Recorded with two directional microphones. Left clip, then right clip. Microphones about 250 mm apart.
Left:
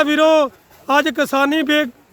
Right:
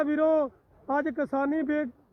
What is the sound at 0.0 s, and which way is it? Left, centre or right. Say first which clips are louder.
Speech: left 11 dB; centre.